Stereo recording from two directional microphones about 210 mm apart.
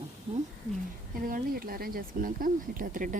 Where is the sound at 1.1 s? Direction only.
40° right (ahead or behind).